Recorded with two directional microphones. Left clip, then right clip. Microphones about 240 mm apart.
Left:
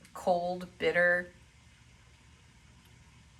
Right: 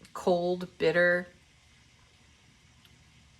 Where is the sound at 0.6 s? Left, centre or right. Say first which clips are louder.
Right 2 dB; centre.